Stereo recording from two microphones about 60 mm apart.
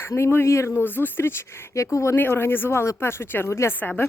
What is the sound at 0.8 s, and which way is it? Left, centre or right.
Speech, left.